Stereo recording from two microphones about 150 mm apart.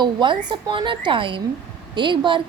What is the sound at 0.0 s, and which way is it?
A woman's voice, 30° right (ahead or behind).